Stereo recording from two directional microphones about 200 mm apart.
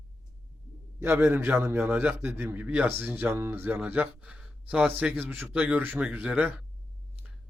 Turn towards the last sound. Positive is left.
turn(degrees=-5)  # may be behind; listen again after turning